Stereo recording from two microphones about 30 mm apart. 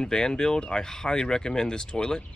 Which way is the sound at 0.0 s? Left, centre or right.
Left.